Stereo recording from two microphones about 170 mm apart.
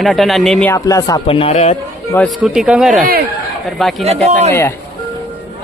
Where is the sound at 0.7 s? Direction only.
20° left (ahead or behind).